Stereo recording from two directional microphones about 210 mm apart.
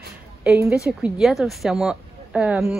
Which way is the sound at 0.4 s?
10° right (ahead or behind).